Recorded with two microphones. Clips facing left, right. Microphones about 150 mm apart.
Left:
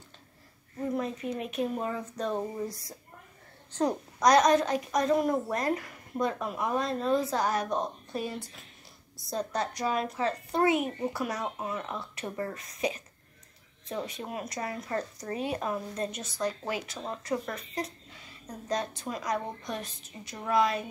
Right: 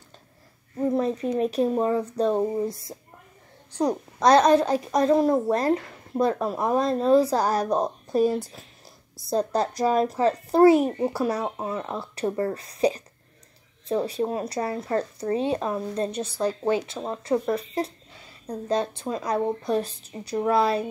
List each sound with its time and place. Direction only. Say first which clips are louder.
0.9 s a child's voice: right 8 dB; 35° right (ahead or behind)
3.7 s a child's voice: right 4 dB; 10° right (ahead or behind)
4.2 s a child's voice: right 5 dB; 30° right (ahead or behind)